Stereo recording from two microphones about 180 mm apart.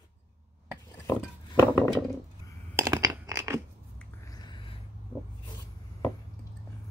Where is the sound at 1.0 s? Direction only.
20° left (ahead or behind).